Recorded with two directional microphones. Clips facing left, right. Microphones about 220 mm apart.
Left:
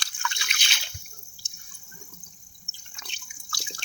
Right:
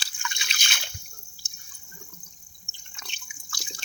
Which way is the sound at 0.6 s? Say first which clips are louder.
Right 2 dB; 50° right (ahead or behind).